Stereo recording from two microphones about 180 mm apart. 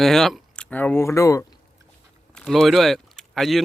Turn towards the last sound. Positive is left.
turn(degrees=0)  # may be behind; listen again after turning